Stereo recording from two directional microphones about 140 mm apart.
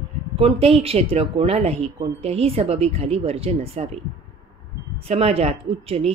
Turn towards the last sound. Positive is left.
turn(degrees=-45)  # may be behind; listen again after turning